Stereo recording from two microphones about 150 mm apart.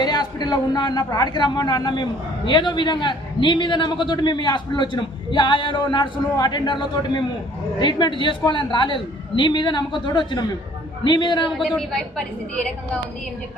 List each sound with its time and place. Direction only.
0.0 s a man's voice: 30° left (ahead or behind)
11.5 s a woman's voice: centre (ahead or behind)